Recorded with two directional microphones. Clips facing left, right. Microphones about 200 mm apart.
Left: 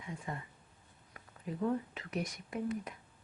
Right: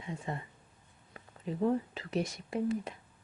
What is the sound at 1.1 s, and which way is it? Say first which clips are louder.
Speech: right 4 dB; 25° right (ahead or behind).